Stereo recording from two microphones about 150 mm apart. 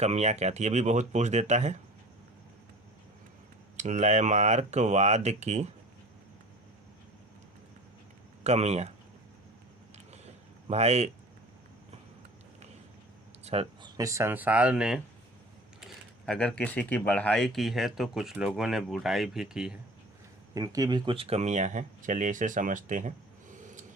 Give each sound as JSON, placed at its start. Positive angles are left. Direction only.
{"t": 0.0, "sound": "speech", "side_deg": -50}
{"t": 3.8, "sound": "speech", "side_deg": -50}
{"t": 8.4, "sound": "speech", "side_deg": -45}
{"t": 10.1, "sound": "a sound", "side_deg": -45}
{"t": 13.4, "sound": "a sound", "side_deg": -45}
{"t": 13.8, "sound": "speech", "side_deg": -25}
{"t": 20.5, "sound": "speech", "side_deg": -25}